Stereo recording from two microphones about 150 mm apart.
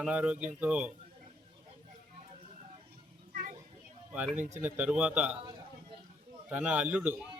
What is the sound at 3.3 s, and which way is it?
Children playing, 55° right (ahead or behind).